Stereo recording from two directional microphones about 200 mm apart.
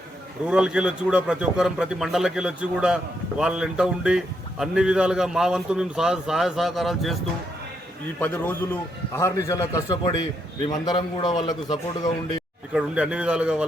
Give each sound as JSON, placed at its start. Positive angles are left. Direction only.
{"t": 0.4, "sound": "a man's voice", "side_deg": -5}
{"t": 8.2, "sound": "a man's voice", "side_deg": 10}
{"t": 12.7, "sound": "a man's voice", "side_deg": -5}